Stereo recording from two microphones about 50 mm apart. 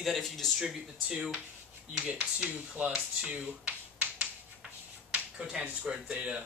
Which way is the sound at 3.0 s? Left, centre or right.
Centre.